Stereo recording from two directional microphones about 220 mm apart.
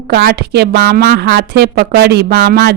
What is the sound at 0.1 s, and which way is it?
Speech, 45° right (ahead or behind).